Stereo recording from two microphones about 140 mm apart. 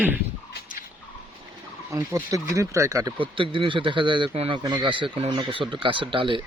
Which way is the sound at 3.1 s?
40° right (ahead or behind).